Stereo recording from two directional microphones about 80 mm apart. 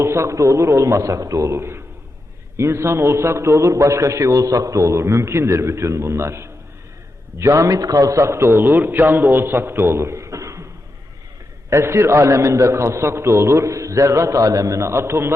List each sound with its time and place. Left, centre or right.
0.0 s a man's voice: right
10.1 s a sound: right
11.7 s a man's voice: right